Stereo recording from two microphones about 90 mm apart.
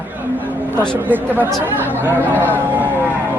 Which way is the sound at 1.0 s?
20° right (ahead or behind).